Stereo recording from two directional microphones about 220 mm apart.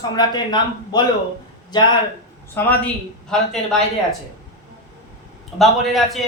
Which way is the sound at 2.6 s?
5° left (ahead or behind).